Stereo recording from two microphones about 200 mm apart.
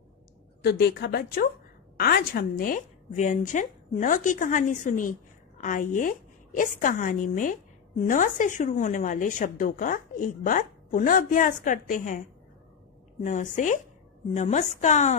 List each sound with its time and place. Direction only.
0.7 s a woman's voice: 50° left (ahead or behind); by 15.1 s 35° left (ahead or behind)